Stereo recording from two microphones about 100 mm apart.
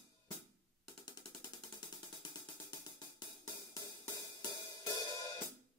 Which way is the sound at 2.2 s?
40° left (ahead or behind).